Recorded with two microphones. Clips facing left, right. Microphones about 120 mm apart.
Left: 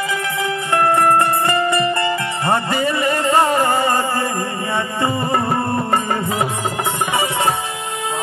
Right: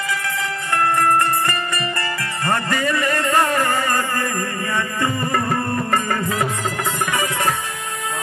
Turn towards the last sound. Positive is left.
turn(degrees=25)  # may be behind; listen again after turning